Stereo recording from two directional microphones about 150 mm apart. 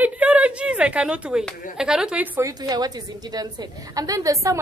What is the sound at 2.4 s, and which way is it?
A woman's voice, 25° right (ahead or behind).